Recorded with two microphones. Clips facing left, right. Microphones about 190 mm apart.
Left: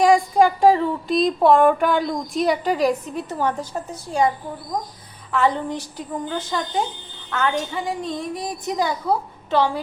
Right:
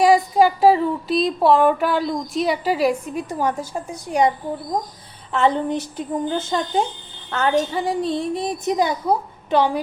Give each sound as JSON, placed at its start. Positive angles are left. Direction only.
{"t": 0.0, "sound": "speech", "side_deg": -5}
{"t": 5.3, "sound": "a woman's voice", "side_deg": -25}